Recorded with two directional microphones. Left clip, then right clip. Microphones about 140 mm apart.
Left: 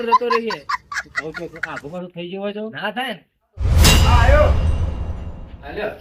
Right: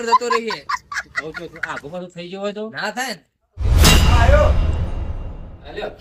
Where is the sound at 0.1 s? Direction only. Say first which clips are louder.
Even; centre (ahead or behind).